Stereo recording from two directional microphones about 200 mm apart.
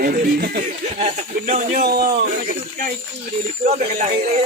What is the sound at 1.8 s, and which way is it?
Speech, 50° right (ahead or behind).